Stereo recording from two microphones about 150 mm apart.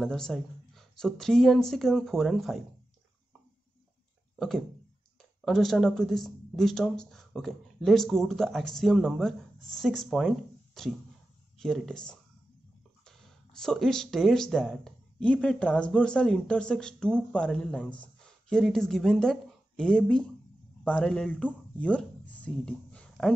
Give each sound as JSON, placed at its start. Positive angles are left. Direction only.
{"t": 0.0, "sound": "speech", "side_deg": 0}
{"t": 4.4, "sound": "speech", "side_deg": 0}